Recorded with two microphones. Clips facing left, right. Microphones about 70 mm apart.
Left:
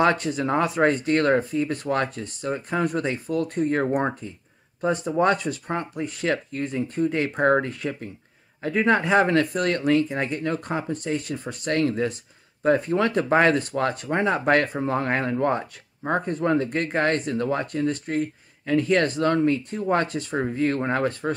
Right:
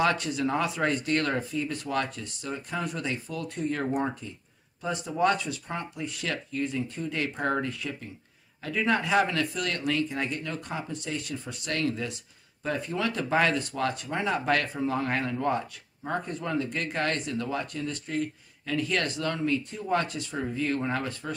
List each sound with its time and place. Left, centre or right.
0.0 s speech: left